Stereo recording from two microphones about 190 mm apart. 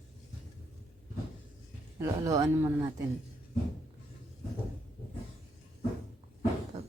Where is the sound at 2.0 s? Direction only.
15° right (ahead or behind).